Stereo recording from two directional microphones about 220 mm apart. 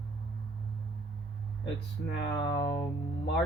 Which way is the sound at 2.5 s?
20° left (ahead or behind).